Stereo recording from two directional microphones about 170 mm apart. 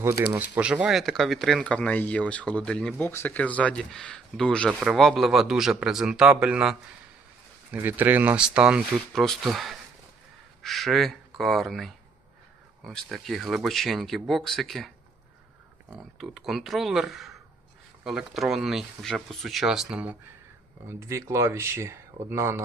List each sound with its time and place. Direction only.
0.3 s speech: 10° right (ahead or behind)
15.9 s speech: centre (ahead or behind)
20.8 s speech: 15° right (ahead or behind)